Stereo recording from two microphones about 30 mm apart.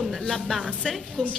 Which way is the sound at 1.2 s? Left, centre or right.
Left.